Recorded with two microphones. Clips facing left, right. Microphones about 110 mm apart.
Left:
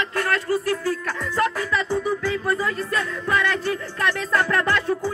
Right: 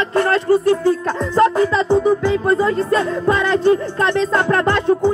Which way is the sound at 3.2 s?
25° right (ahead or behind).